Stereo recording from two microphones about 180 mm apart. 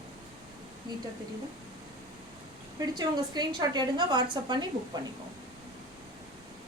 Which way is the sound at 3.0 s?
25° right (ahead or behind).